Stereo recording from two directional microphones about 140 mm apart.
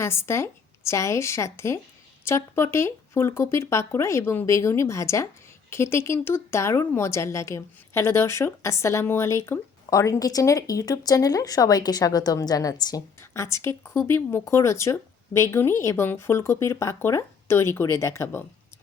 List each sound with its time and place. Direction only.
0.0 s speech: 20° left (ahead or behind)